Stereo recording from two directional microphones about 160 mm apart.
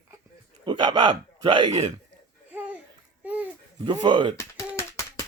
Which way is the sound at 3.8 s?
30° right (ahead or behind).